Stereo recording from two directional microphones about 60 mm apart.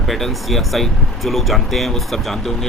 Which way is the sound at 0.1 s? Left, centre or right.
Centre.